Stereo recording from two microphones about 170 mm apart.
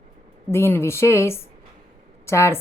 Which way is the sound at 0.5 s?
15° left (ahead or behind).